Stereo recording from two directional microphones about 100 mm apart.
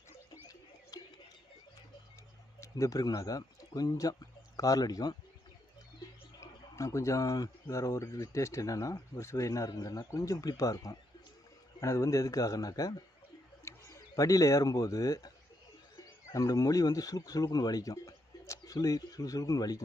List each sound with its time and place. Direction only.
0.9 s a sound: 40° left (ahead or behind)
2.6 s speech: 30° left (ahead or behind)
6.4 s speech: 30° left (ahead or behind)
16.3 s speech: 35° left (ahead or behind)